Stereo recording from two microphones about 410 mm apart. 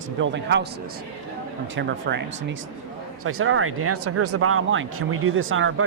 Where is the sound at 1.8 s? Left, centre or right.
Right.